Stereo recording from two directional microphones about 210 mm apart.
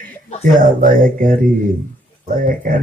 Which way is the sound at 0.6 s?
40° right (ahead or behind).